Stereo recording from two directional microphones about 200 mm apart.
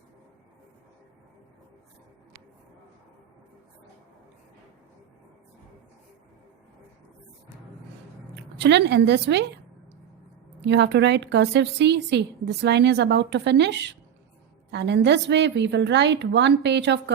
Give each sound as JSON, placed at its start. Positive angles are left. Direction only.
{"t": 8.5, "sound": "a woman's voice", "side_deg": -60}
{"t": 10.6, "sound": "a woman's voice", "side_deg": -60}